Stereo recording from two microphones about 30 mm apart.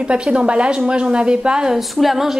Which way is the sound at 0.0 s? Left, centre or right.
Right.